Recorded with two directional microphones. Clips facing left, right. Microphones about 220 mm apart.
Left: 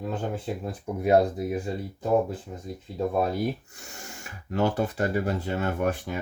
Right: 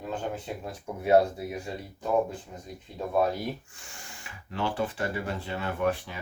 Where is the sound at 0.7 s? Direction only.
40° left (ahead or behind).